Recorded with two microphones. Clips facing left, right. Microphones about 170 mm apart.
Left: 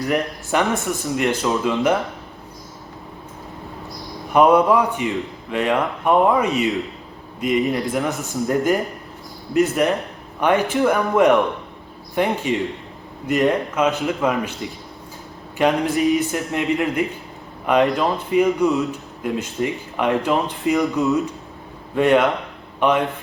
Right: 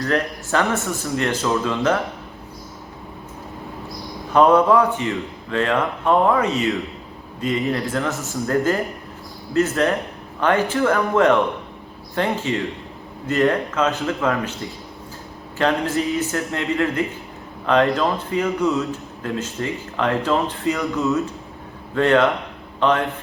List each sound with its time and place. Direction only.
0.0 s a man's voice: 15° left (ahead or behind)
4.3 s a man's voice: 15° left (ahead or behind)
15.5 s a man's voice: 15° left (ahead or behind)